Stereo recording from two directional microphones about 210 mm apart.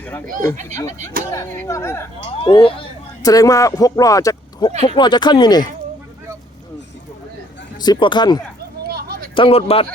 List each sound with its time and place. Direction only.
0.0 s speech: 10° left (ahead or behind)
0.3 s speech: 40° right (ahead or behind)
1.3 s speech: 15° left (ahead or behind)
2.2 s speech: 25° left (ahead or behind)
7.8 s speech: 20° left (ahead or behind)
8.9 s a sound: 45° right (ahead or behind)
9.3 s speech: 25° left (ahead or behind)